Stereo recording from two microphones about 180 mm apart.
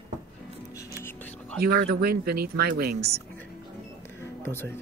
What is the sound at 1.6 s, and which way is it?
Speech, 60° right (ahead or behind).